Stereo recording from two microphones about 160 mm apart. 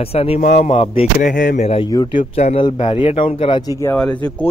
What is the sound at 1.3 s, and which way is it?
Speech, 55° left (ahead or behind).